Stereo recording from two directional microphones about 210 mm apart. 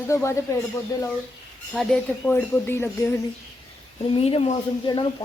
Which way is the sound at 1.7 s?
5° left (ahead or behind).